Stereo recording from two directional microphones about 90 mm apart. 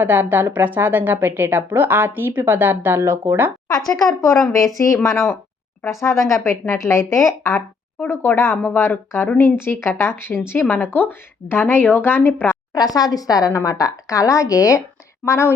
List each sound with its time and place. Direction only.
0.0 s a woman's voice: 20° right (ahead or behind)
3.7 s a woman's voice: 45° left (ahead or behind); by 12.5 s 20° left (ahead or behind)
12.7 s a woman's voice: 45° left (ahead or behind)